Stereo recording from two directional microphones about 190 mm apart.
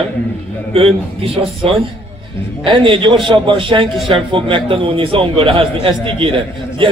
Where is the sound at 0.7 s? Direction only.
30° right (ahead or behind).